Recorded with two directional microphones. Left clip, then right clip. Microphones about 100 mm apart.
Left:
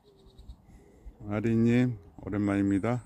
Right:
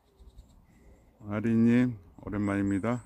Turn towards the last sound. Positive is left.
turn(degrees=0)  # may be behind; listen again after turning